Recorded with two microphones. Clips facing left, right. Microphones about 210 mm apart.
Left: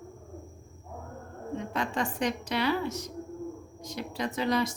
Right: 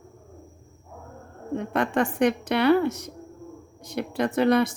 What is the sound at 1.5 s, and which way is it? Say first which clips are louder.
Speech: right 7 dB; 60° right (ahead or behind).